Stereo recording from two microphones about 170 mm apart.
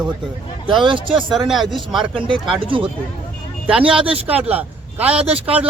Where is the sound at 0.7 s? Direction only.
30° right (ahead or behind).